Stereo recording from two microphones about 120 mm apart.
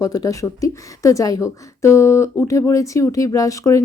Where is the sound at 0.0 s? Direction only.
30° left (ahead or behind).